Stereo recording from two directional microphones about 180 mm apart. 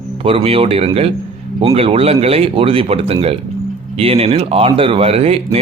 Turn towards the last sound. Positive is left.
turn(degrees=-35)  # may be behind; listen again after turning